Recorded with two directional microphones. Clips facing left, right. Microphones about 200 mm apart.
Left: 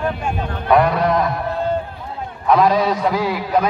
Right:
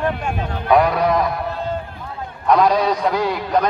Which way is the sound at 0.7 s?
Centre (ahead or behind).